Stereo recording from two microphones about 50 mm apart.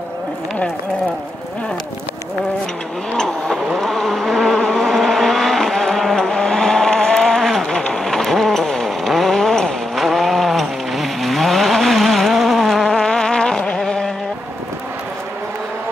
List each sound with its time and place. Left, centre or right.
3.2 s vehicle: centre